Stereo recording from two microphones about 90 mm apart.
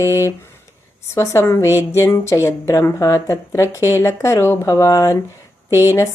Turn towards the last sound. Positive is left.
turn(degrees=30)  # may be behind; listen again after turning